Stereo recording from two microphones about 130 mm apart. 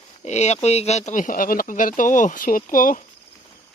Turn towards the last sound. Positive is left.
turn(degrees=90)